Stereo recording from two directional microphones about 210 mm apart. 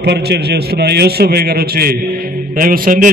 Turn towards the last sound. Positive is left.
turn(degrees=-40)  # may be behind; listen again after turning